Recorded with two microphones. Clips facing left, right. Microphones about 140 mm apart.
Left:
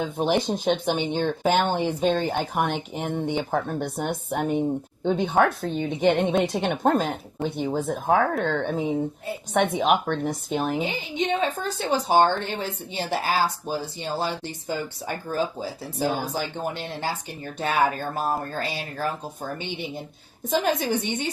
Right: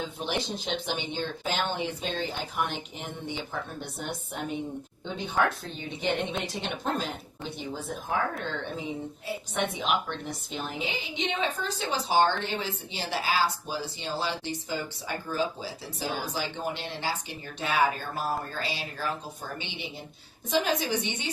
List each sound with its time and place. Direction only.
0.0 s speech: 50° left (ahead or behind)